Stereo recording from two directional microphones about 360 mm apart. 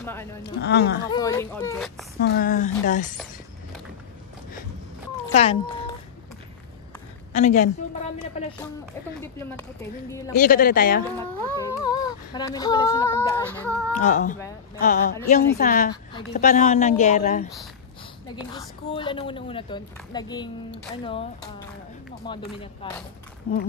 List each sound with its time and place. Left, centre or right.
0.0 s speech: centre
0.4 s a woman's voice: left
1.0 s a woman's voice: centre
2.2 s a woman's voice: left
5.2 s speech: centre
7.3 s a woman's voice: centre
10.3 s a woman's voice: left
11.6 s female singing: centre
13.9 s a woman's voice: left
22.2 s a woman's voice: centre